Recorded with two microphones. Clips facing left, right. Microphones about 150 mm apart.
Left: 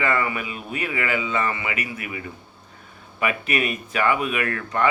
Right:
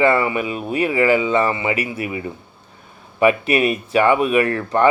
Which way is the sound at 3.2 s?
30° right (ahead or behind).